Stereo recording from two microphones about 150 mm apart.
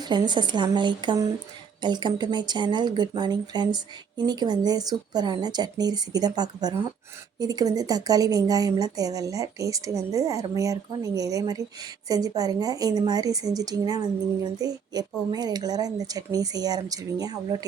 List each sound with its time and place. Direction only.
0.0 s a woman's voice: 30° right (ahead or behind)